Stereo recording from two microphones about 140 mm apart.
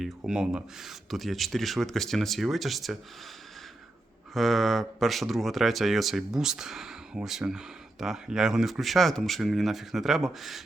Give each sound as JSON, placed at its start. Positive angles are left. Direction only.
{"t": 0.0, "sound": "speech", "side_deg": -5}
{"t": 4.4, "sound": "speech", "side_deg": 0}